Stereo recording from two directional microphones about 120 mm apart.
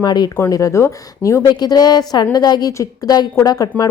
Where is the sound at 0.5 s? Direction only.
25° left (ahead or behind).